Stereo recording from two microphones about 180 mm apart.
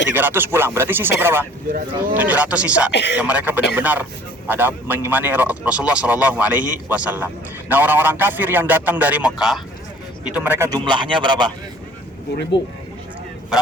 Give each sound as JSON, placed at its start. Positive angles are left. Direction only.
{"t": 0.1, "sound": "speech", "side_deg": -10}
{"t": 2.9, "sound": "speech", "side_deg": 70}
{"t": 3.2, "sound": "a man's voice", "side_deg": -10}